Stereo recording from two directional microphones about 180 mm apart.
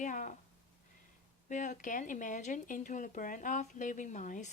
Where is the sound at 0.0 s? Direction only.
45° left (ahead or behind).